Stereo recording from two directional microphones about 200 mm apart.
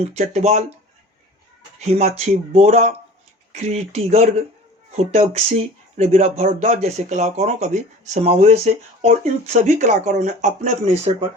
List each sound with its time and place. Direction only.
0.1 s speech: 35° right (ahead or behind)
1.8 s speech: 35° right (ahead or behind)